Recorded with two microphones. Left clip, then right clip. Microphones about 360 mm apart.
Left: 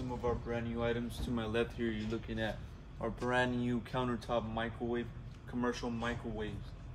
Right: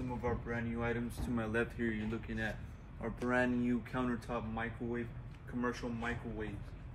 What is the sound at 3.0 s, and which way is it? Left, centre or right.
Speech, left.